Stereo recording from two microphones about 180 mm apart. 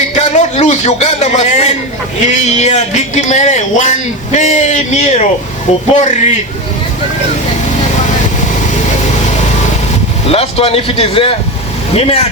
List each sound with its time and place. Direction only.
0.1 s a man's voice: 40° left (ahead or behind)
10.2 s a man's voice: 35° left (ahead or behind)